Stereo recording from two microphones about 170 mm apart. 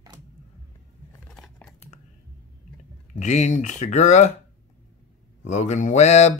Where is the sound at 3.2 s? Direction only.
45° left (ahead or behind).